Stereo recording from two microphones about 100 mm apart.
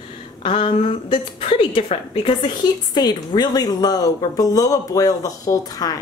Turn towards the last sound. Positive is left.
turn(degrees=40)  # may be behind; listen again after turning